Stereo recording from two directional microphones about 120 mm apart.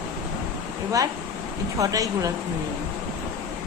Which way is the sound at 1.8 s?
30° right (ahead or behind).